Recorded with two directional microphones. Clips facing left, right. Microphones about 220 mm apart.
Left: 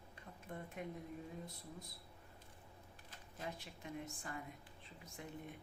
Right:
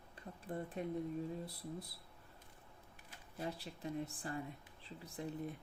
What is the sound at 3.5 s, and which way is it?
Speech, 35° right (ahead or behind).